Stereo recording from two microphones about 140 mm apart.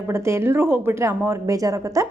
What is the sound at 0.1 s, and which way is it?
A woman's voice, 20° right (ahead or behind).